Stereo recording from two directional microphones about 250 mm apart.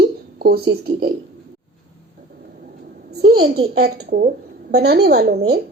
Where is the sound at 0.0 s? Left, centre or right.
Right.